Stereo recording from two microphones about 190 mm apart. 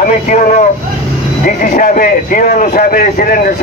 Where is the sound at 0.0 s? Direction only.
40° left (ahead or behind).